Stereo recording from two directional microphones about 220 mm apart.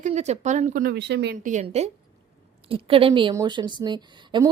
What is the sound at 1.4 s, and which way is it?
A woman's voice, 30° right (ahead or behind).